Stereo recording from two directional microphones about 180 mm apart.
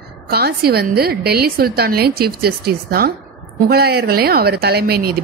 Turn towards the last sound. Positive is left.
turn(degrees=-60)  # may be behind; listen again after turning